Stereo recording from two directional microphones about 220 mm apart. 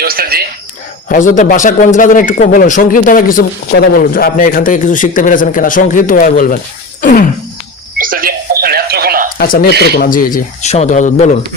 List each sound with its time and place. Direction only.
0.0 s a sound: 45° right (ahead or behind)
1.0 s speech: 35° left (ahead or behind)
7.9 s telephone: 40° right (ahead or behind)
9.4 s speech: 40° left (ahead or behind)